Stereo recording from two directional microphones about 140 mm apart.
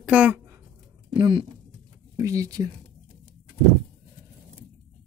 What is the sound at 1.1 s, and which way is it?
Speech, 35° right (ahead or behind).